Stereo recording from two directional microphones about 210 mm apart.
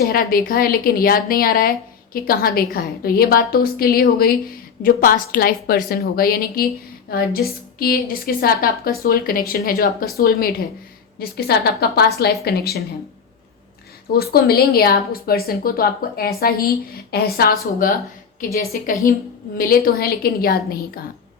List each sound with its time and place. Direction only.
0.0 s a woman's voice: 45° left (ahead or behind)
14.1 s a woman's voice: 50° left (ahead or behind)